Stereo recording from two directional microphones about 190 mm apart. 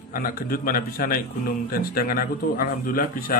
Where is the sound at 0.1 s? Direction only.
50° left (ahead or behind).